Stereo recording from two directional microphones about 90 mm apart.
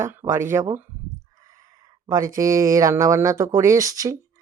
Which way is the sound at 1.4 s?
35° right (ahead or behind).